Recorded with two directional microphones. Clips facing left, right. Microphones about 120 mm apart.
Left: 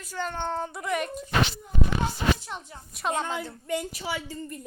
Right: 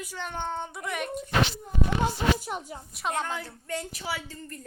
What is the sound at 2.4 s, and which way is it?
Speech, 10° right (ahead or behind).